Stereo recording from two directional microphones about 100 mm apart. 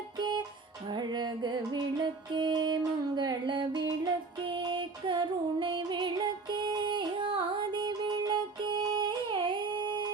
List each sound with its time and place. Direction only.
0.2 s music: 50° right (ahead or behind)
4.4 s music: 55° right (ahead or behind)